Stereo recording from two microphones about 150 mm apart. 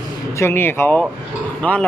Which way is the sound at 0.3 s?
15° left (ahead or behind).